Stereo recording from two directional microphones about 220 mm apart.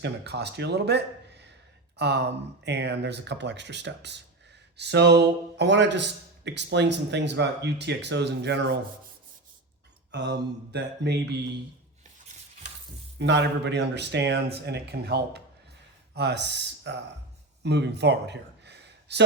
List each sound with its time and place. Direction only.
0.0 s a man's voice: 50° right (ahead or behind)
10.2 s a man's voice: 50° right (ahead or behind)
13.1 s a man's voice: 50° right (ahead or behind)
17.6 s a sound: 50° right (ahead or behind)